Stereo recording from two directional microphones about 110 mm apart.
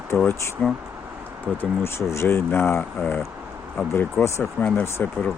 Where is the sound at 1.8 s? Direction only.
25° left (ahead or behind).